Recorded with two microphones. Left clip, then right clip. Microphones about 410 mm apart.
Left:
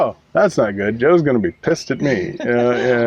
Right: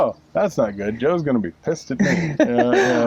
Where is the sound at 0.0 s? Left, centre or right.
Left.